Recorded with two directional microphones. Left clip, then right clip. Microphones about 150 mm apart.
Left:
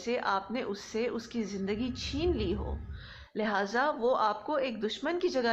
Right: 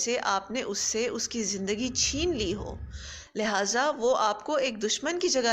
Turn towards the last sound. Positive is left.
turn(degrees=-25)  # may be behind; listen again after turning